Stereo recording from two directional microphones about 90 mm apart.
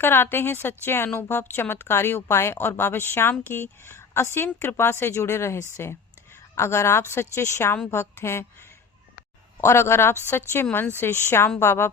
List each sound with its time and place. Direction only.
0.0 s a woman's voice: 25° left (ahead or behind)
9.6 s a woman's voice: 30° left (ahead or behind)